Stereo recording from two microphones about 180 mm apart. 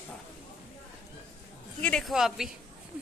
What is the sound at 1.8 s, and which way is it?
Speech, centre (ahead or behind).